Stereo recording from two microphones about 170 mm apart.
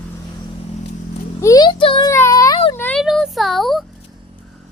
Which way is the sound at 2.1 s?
20° left (ahead or behind).